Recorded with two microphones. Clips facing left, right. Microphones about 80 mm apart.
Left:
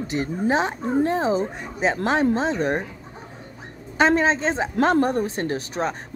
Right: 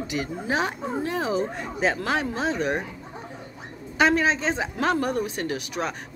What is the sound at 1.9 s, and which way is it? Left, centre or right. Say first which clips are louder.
Speech: left 6 dB; left.